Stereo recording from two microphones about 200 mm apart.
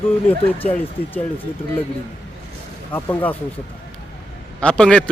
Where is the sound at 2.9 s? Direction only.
10° left (ahead or behind).